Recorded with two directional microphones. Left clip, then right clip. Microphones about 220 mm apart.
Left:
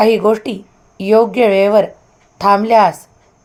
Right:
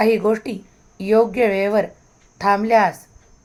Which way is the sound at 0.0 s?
20° left (ahead or behind).